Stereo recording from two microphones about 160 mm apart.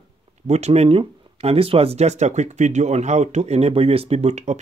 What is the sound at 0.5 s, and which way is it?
Speech, 45° right (ahead or behind).